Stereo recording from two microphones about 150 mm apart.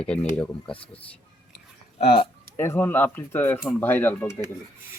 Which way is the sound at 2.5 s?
15° left (ahead or behind).